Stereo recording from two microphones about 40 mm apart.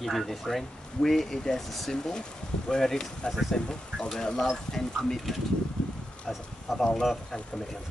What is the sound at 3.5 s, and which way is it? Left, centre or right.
Speech, left.